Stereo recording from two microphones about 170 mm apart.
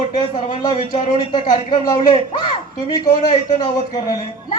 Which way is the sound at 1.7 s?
30° left (ahead or behind).